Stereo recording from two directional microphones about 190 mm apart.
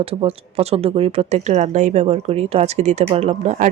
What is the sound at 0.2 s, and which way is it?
Speech, 30° right (ahead or behind).